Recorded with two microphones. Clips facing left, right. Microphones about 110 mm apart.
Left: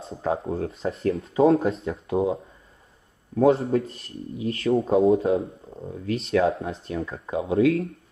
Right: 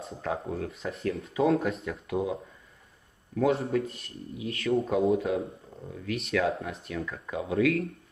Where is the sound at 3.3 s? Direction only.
30° left (ahead or behind).